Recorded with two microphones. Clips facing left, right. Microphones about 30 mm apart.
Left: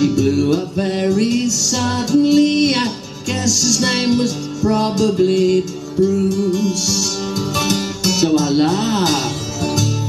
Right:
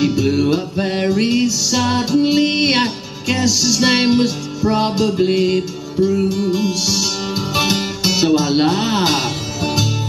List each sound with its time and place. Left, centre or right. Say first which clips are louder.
0.0 s music: left 1 dB; right